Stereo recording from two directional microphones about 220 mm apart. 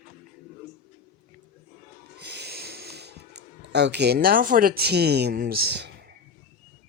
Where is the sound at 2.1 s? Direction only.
50° right (ahead or behind).